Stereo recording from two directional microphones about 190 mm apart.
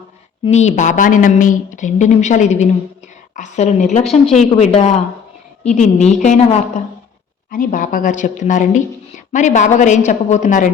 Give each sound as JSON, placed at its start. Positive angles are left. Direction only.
{"t": 0.4, "sound": "a woman's voice", "side_deg": 35}